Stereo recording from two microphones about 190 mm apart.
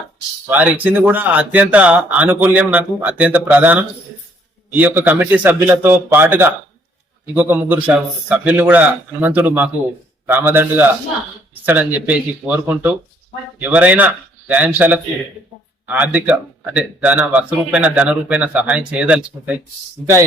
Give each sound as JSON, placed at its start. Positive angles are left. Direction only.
{"t": 0.5, "sound": "speech", "side_deg": -10}